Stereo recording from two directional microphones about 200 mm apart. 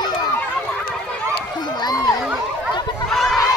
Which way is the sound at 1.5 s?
20° left (ahead or behind).